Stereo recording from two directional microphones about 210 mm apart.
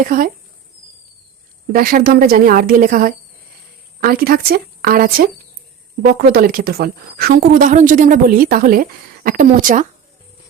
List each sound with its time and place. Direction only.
0.0 s a woman's voice: 40° right (ahead or behind)
1.7 s a woman's voice: 45° right (ahead or behind)